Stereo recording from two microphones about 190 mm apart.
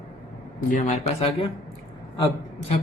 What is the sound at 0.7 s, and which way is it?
Speech, 35° left (ahead or behind).